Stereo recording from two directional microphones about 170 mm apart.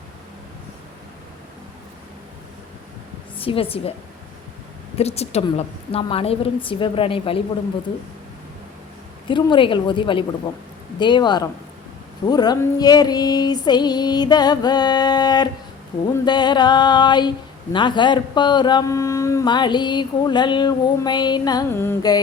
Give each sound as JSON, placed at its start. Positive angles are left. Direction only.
{"t": 3.3, "sound": "a woman's voice", "side_deg": 30}
{"t": 4.9, "sound": "a woman's voice", "side_deg": 40}
{"t": 9.2, "sound": "speech", "side_deg": 30}